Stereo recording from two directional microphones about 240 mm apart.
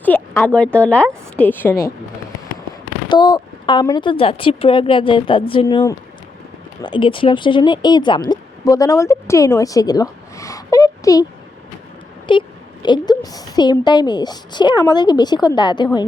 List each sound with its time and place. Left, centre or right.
0.0 s a woman's voice: centre
3.1 s a woman's voice: centre